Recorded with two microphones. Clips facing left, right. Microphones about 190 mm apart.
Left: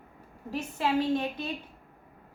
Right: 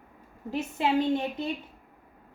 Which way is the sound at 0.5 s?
20° right (ahead or behind).